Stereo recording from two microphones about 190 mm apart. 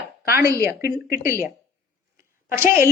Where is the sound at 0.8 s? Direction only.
55° left (ahead or behind).